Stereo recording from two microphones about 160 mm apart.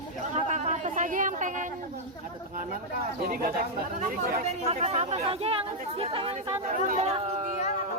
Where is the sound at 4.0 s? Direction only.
45° right (ahead or behind).